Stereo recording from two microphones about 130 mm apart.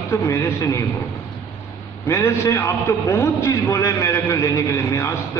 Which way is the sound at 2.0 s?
20° left (ahead or behind).